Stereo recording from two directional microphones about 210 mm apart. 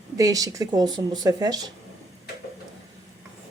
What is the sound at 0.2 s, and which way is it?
Speech, 15° right (ahead or behind).